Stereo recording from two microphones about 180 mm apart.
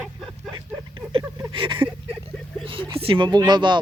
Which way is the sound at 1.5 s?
30° right (ahead or behind).